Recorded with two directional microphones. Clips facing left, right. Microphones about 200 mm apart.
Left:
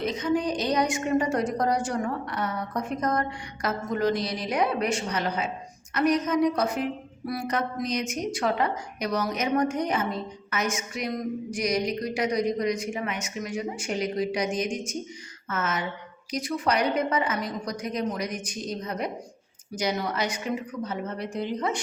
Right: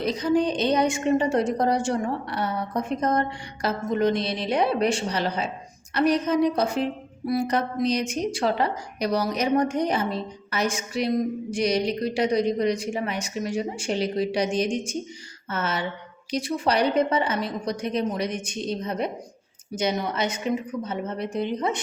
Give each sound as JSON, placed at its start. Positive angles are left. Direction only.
{"t": 0.0, "sound": "a woman's voice", "side_deg": -35}